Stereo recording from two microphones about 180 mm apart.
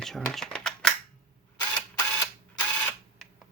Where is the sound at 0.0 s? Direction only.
Centre (ahead or behind).